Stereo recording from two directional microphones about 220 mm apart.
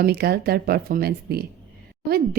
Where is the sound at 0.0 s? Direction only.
45° right (ahead or behind).